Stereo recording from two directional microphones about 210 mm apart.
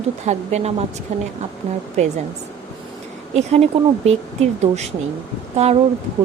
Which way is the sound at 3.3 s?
30° right (ahead or behind).